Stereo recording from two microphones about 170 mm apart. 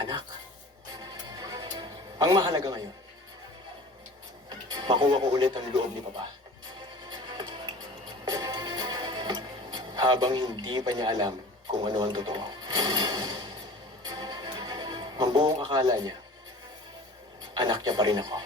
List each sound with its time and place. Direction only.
0.0 s music: 25° right (ahead or behind)
4.4 s speech: 25° right (ahead or behind)
7.1 s music: 25° right (ahead or behind)
11.8 s speech: 25° right (ahead or behind)
14.2 s music: 25° right (ahead or behind)
15.4 s speech: 25° right (ahead or behind)
17.5 s speech: 25° right (ahead or behind)